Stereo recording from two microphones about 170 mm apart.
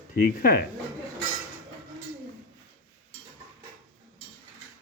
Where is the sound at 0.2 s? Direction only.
60° left (ahead or behind).